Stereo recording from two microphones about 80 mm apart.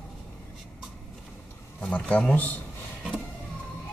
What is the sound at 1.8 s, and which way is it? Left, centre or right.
Speech, centre.